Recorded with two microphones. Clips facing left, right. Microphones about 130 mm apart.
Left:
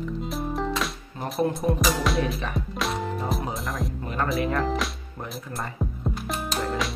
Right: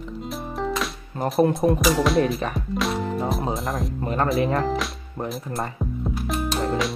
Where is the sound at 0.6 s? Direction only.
Centre (ahead or behind).